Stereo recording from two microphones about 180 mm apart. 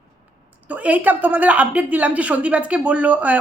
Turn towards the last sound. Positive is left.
turn(degrees=-10)  # may be behind; listen again after turning